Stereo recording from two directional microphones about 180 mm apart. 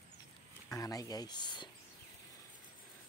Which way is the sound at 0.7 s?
20° left (ahead or behind).